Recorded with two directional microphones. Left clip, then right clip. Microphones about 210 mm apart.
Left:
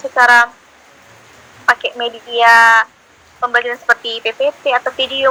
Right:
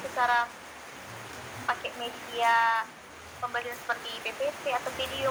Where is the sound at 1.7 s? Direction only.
40° left (ahead or behind).